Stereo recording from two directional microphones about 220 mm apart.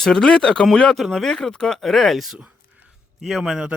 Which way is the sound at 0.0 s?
5° left (ahead or behind).